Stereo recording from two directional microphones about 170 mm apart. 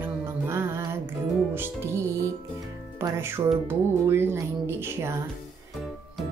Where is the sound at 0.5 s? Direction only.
15° right (ahead or behind).